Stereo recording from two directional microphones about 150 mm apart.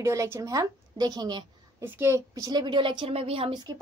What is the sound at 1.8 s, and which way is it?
A woman's voice, 15° right (ahead or behind).